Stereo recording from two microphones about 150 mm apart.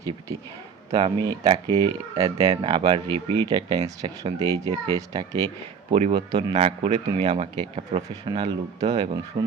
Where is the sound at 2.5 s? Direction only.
35° right (ahead or behind).